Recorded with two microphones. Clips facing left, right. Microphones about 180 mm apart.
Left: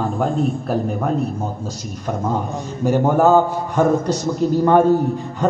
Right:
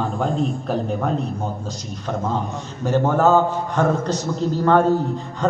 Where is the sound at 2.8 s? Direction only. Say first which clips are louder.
Left 2 dB; 10° left (ahead or behind).